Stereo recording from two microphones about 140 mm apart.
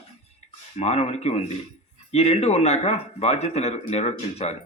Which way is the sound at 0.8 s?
50° left (ahead or behind).